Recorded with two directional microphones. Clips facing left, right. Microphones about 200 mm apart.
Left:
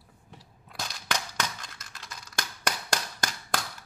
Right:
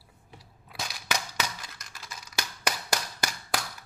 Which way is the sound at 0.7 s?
5° right (ahead or behind).